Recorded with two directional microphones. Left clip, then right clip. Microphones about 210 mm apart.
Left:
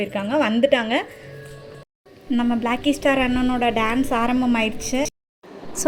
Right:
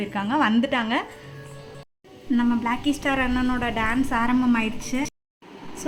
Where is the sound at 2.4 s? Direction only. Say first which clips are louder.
Left 3 dB; 10° left (ahead or behind).